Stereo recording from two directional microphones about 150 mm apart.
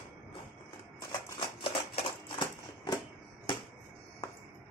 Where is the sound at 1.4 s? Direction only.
35° left (ahead or behind).